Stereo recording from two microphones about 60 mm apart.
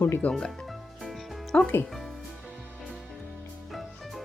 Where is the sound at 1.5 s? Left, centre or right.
Centre.